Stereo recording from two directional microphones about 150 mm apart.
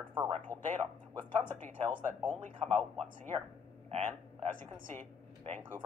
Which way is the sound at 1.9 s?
10° right (ahead or behind).